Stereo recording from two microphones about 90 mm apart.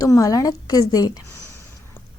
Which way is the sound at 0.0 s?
40° left (ahead or behind).